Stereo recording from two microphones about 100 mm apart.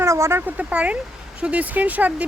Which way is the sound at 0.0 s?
25° right (ahead or behind).